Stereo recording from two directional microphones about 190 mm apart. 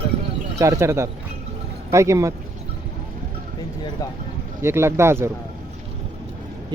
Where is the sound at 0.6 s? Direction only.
15° right (ahead or behind).